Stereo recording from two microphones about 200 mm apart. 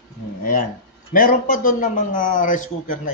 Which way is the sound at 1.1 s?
45° left (ahead or behind).